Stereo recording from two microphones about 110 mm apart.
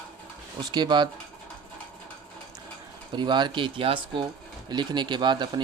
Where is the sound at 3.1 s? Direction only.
45° right (ahead or behind).